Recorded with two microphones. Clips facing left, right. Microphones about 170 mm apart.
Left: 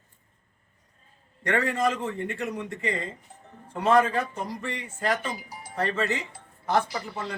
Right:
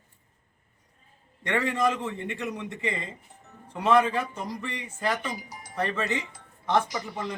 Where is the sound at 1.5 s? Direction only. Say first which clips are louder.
Left 1 dB; 15° right (ahead or behind).